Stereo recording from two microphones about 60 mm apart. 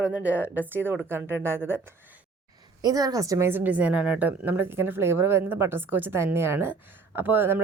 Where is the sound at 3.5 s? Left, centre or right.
Right.